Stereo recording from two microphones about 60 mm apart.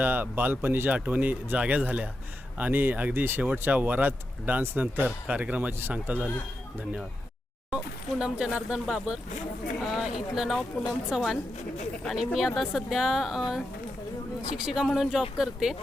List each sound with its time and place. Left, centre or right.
0.0 s speech: right
8.2 s speech: centre
9.8 s speech: centre